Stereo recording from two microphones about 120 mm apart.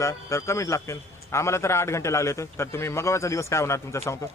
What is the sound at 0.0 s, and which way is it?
Speech, 25° left (ahead or behind).